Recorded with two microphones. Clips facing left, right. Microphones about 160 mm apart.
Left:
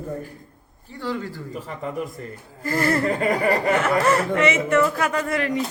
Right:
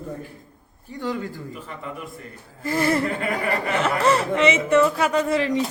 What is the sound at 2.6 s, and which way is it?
Speech, 20° right (ahead or behind).